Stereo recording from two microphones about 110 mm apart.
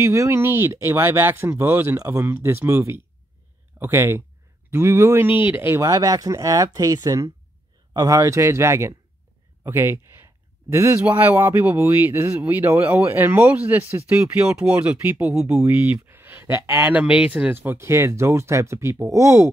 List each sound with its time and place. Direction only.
0.0 s speech: 25° right (ahead or behind)
9.6 s a sound: 20° right (ahead or behind)
11.1 s speech: 15° right (ahead or behind)